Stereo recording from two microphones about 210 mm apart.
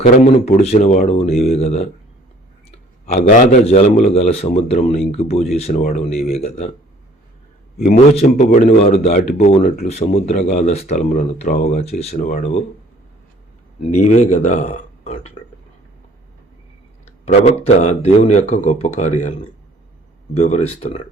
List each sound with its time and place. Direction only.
0.0 s a man's voice: 30° left (ahead or behind)
3.1 s a man's voice: 35° left (ahead or behind)
7.8 s a man's voice: 35° left (ahead or behind)
14.0 s speech: 35° left (ahead or behind)
17.2 s a man's voice: 30° left (ahead or behind)
20.3 s speech: 30° left (ahead or behind)